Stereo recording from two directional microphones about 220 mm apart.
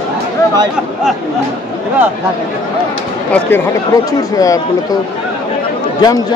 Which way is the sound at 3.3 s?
10° left (ahead or behind).